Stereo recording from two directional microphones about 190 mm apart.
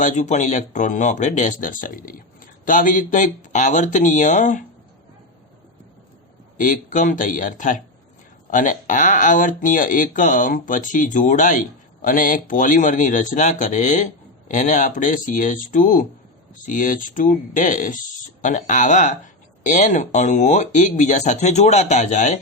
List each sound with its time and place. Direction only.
0.0 s speech: 40° left (ahead or behind)
6.6 s speech: 40° left (ahead or behind)